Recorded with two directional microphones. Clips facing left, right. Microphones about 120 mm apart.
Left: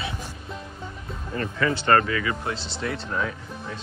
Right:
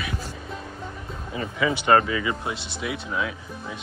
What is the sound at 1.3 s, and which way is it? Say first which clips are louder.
Speech: even; 10° right (ahead or behind).